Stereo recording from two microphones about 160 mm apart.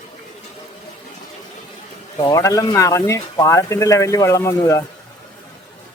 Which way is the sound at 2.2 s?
25° left (ahead or behind).